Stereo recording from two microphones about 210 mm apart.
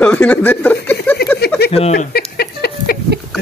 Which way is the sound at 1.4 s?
50° left (ahead or behind).